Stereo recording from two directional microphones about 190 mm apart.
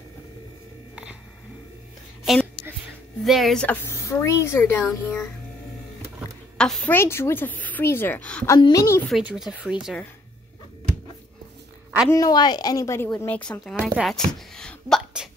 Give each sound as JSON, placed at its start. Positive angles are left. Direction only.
{"t": 2.3, "sound": "a woman's voice", "side_deg": 0}
{"t": 6.6, "sound": "speech", "side_deg": 5}
{"t": 8.5, "sound": "speech", "side_deg": 20}
{"t": 9.0, "sound": "speech", "side_deg": 0}
{"t": 12.1, "sound": "a woman's voice", "side_deg": 20}
{"t": 14.5, "sound": "a sound", "side_deg": 5}